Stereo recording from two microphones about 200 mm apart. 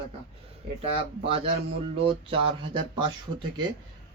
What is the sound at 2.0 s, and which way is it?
Speech, 30° right (ahead or behind).